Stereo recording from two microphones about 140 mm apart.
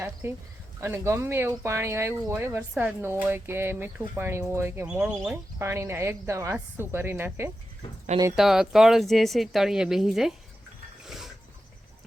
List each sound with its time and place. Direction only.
0.0 s speech: 20° right (ahead or behind)
8.4 s speech: 5° right (ahead or behind)
11.0 s a sound: centre (ahead or behind)